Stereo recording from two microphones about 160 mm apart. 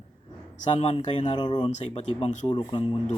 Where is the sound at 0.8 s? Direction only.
45° left (ahead or behind).